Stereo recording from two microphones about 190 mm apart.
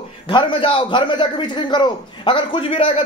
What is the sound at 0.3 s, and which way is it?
A man's voice, 25° left (ahead or behind).